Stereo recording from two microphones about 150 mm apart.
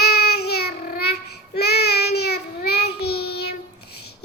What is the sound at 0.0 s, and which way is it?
Child singing, 90° left.